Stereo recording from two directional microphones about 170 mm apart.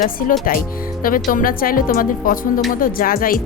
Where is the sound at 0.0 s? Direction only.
55° left (ahead or behind).